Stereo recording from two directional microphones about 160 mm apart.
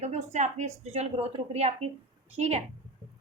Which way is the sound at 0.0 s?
45° right (ahead or behind).